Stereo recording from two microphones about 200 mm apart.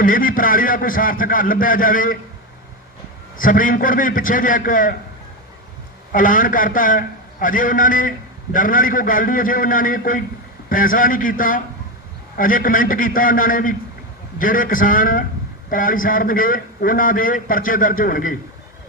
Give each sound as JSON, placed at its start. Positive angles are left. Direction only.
{"t": 0.0, "sound": "a man's voice", "side_deg": 45}
{"t": 3.3, "sound": "a man's voice", "side_deg": 45}
{"t": 6.1, "sound": "a man's voice", "side_deg": 45}